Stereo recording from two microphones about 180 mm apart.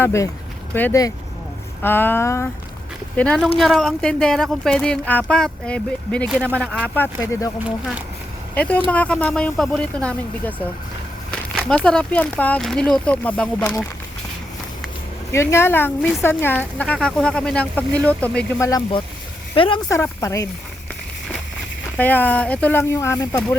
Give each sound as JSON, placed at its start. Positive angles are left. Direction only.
{"t": 0.0, "sound": "speech", "side_deg": 15}
{"t": 6.8, "sound": "speech", "side_deg": 10}
{"t": 8.5, "sound": "speech", "side_deg": 10}
{"t": 11.7, "sound": "speech", "side_deg": 5}
{"t": 15.3, "sound": "speech", "side_deg": 15}
{"t": 16.0, "sound": "speech", "side_deg": 0}
{"t": 18.7, "sound": "speech", "side_deg": 25}
{"t": 19.9, "sound": "speech", "side_deg": 15}
{"t": 21.9, "sound": "speech", "side_deg": 10}